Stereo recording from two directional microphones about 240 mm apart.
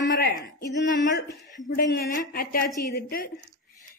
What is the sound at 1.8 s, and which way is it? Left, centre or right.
A woman's voice, left.